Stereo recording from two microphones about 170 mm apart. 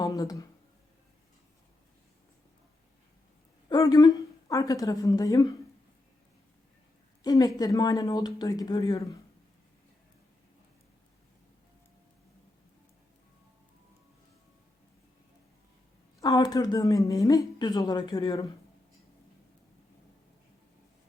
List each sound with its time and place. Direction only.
0.0 s a sound: 20° left (ahead or behind)
3.7 s a woman's voice: 25° left (ahead or behind)
7.3 s speech: 20° left (ahead or behind)
16.2 s speech: 20° left (ahead or behind)